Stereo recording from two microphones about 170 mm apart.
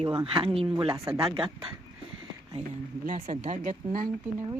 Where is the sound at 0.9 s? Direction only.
15° right (ahead or behind).